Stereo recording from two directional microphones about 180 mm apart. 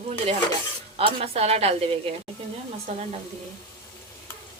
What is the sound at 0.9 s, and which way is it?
A woman's voice, 35° right (ahead or behind).